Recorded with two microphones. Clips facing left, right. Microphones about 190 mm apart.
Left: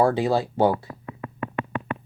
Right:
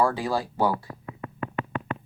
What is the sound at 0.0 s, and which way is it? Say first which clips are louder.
Speech: left 4 dB; 25° left (ahead or behind).